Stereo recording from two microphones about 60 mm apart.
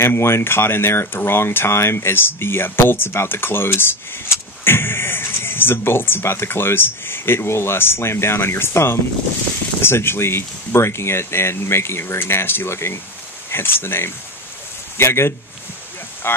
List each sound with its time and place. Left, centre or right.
0.0 s speech: left